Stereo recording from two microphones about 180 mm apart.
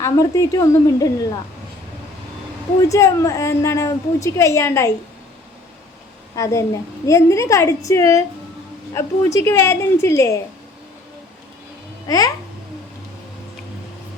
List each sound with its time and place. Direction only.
0.0 s a woman's voice: 20° left (ahead or behind)
2.9 s a woman's voice: 20° left (ahead or behind)
6.3 s a woman's voice: 15° left (ahead or behind)
12.0 s a woman's voice: 20° left (ahead or behind)